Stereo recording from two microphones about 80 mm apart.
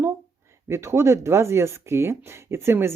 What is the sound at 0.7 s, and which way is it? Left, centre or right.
Speech, right.